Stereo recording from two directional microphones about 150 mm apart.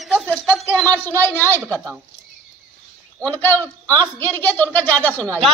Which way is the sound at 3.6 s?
20° right (ahead or behind).